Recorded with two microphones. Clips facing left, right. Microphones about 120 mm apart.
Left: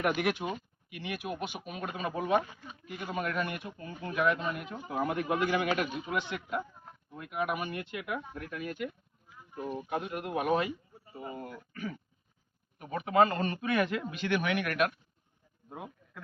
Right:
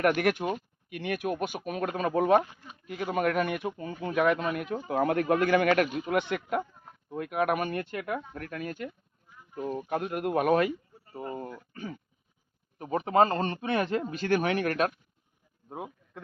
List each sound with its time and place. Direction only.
0.0 s speech: 50° right (ahead or behind)
9.9 s speech: 50° right (ahead or behind)
11.3 s a man's voice: 30° right (ahead or behind)
15.7 s a sound: 25° right (ahead or behind)